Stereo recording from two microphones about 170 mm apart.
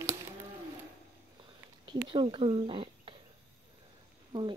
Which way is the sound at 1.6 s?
25° right (ahead or behind).